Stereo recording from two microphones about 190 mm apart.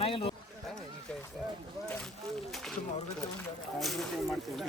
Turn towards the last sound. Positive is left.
turn(degrees=0)  # may be behind; listen again after turning